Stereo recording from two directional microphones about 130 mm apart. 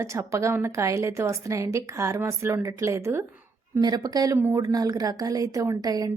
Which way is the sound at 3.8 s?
30° right (ahead or behind).